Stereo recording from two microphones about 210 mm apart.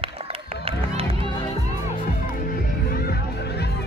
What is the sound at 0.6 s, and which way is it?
Music, 25° right (ahead or behind).